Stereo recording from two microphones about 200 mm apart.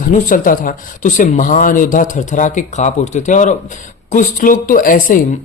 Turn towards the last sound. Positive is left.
turn(degrees=45)  # may be behind; listen again after turning